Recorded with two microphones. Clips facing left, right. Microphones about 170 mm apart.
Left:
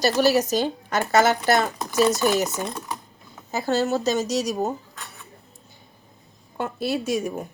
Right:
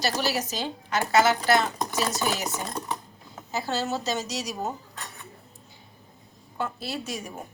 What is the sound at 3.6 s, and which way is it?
Speech, 50° left (ahead or behind).